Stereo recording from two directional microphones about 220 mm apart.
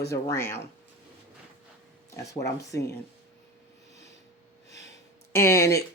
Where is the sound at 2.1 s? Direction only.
15° left (ahead or behind).